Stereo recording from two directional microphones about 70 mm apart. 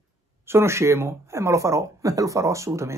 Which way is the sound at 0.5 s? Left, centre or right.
Right.